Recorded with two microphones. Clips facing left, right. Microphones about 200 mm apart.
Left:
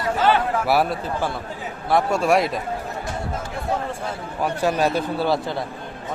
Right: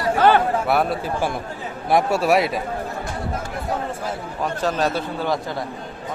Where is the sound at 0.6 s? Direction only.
5° left (ahead or behind).